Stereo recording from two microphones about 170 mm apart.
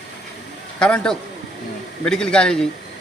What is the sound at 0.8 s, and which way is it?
A man's voice, 5° left (ahead or behind).